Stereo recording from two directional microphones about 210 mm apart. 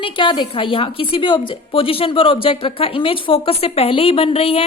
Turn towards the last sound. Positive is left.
turn(degrees=25)  # may be behind; listen again after turning